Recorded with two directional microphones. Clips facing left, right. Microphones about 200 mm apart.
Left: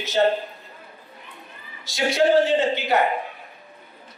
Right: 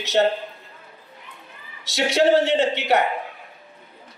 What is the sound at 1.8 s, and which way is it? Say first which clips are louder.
A man's voice: right 1 dB; 75° right (ahead or behind).